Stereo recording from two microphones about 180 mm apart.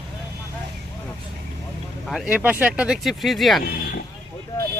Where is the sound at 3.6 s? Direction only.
55° left (ahead or behind).